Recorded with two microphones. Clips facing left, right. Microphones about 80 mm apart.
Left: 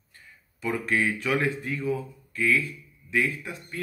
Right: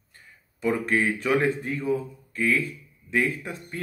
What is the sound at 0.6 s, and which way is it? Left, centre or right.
Speech, right.